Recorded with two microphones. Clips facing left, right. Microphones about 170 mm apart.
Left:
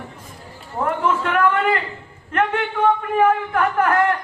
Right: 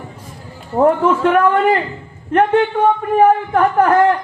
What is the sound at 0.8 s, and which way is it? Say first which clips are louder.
A man's voice: right 8 dB; 40° right (ahead or behind).